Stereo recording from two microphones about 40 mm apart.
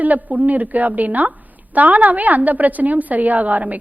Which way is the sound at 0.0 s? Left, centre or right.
Right.